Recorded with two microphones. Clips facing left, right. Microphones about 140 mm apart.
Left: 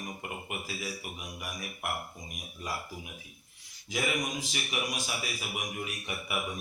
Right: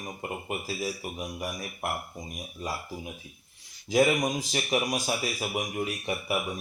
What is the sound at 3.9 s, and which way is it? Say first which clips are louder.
Speech: right 9 dB; 35° right (ahead or behind).